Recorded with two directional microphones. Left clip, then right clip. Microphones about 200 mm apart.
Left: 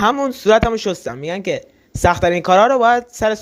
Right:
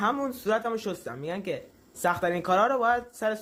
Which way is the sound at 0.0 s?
40° left (ahead or behind).